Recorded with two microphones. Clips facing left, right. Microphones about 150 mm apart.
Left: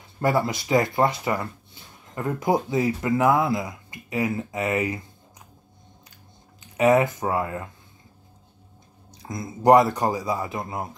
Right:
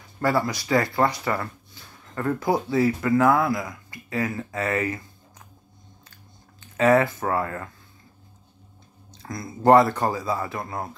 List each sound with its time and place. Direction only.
0.2 s speech: 20° left (ahead or behind)
6.6 s speech: 15° left (ahead or behind)
9.1 s speech: 15° left (ahead or behind)